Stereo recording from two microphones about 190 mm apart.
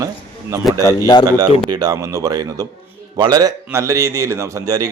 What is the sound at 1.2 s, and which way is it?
Speech, 20° right (ahead or behind).